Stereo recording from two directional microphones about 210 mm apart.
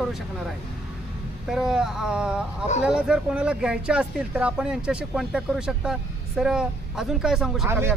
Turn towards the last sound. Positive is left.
turn(degrees=-10)  # may be behind; listen again after turning